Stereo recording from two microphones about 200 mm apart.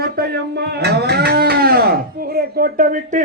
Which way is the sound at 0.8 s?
55° right (ahead or behind).